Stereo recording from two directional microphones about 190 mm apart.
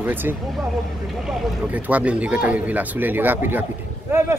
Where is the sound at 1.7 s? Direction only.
10° right (ahead or behind).